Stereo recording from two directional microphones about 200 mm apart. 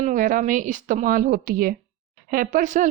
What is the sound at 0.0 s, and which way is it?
Speech, 40° right (ahead or behind).